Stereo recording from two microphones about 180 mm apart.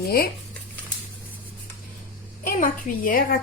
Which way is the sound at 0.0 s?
55° left (ahead or behind).